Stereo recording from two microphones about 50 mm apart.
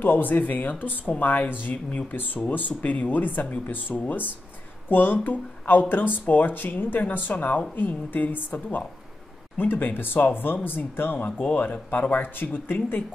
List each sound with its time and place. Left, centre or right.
0.0 s speech: left
11.4 s speech: left